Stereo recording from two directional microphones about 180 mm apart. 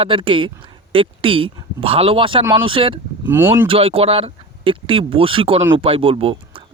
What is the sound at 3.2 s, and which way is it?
Speech, 15° right (ahead or behind).